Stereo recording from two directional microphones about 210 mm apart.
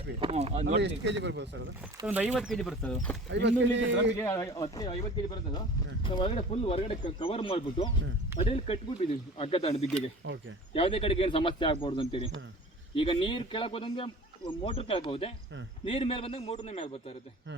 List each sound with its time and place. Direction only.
0.2 s speech: 30° right (ahead or behind)
0.8 s a man's voice: 55° right (ahead or behind)
2.0 s speech: 20° right (ahead or behind)
2.3 s speech: centre (ahead or behind)
3.2 s a man's voice: 55° right (ahead or behind)
4.2 s speech: 10° left (ahead or behind); by 9.8 s 30° left (ahead or behind)
10.2 s speech: 55° right (ahead or behind)
10.8 s speech: 25° left (ahead or behind)